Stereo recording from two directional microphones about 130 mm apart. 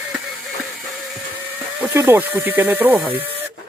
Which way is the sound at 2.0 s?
15° right (ahead or behind).